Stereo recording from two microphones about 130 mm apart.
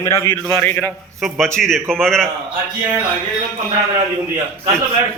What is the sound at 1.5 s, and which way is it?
Speech, 5° left (ahead or behind).